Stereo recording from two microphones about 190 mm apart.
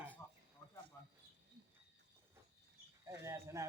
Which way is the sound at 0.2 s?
10° left (ahead or behind).